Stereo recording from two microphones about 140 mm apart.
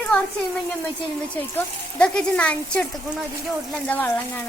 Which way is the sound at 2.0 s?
5° left (ahead or behind).